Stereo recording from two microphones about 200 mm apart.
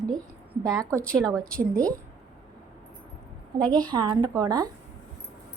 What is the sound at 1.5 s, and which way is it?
Speech, 5° left (ahead or behind).